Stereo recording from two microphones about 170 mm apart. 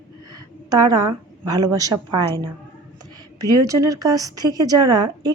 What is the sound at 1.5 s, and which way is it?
A woman's voice, 20° right (ahead or behind).